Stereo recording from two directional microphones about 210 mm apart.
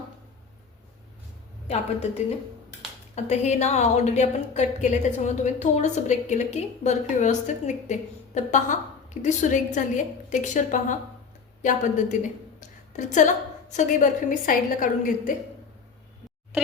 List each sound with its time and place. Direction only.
1.6 s a woman's voice: 30° left (ahead or behind)
3.2 s a woman's voice: 35° left (ahead or behind)